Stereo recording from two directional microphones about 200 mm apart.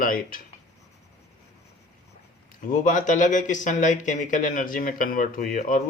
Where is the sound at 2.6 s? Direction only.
40° left (ahead or behind).